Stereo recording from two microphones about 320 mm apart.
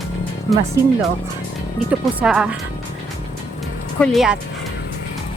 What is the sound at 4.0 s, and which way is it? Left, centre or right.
Speech, centre.